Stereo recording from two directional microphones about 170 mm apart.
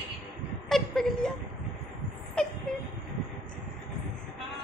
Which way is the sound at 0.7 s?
Centre (ahead or behind).